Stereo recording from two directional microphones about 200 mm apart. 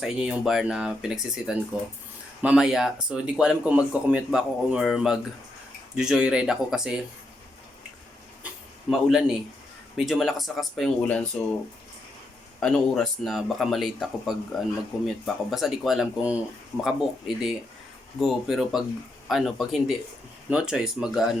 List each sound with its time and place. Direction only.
0.0 s speech: centre (ahead or behind)
8.9 s speech: centre (ahead or behind)
12.5 s speech: 5° left (ahead or behind)